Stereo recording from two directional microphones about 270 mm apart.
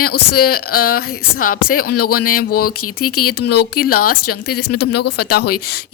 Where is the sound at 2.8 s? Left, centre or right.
Left.